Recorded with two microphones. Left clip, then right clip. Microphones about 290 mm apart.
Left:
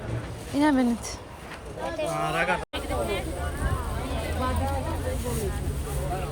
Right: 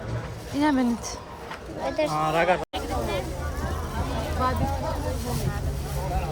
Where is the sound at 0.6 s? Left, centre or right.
Centre.